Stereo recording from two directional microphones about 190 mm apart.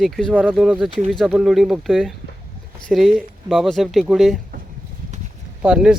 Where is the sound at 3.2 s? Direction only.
Centre (ahead or behind).